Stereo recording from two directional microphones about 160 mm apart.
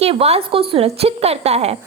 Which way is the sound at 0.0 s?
40° right (ahead or behind).